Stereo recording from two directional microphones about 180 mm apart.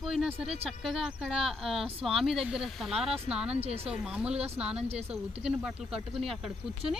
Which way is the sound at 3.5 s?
35° right (ahead or behind).